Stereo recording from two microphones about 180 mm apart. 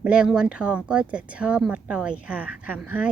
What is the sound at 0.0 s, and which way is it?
Speech, 5° right (ahead or behind).